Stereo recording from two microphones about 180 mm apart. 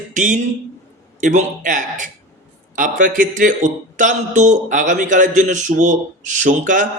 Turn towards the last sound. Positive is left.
turn(degrees=-45)  # may be behind; listen again after turning